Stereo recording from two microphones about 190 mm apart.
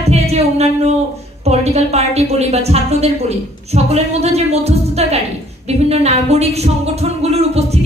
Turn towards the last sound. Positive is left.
turn(degrees=-35)  # may be behind; listen again after turning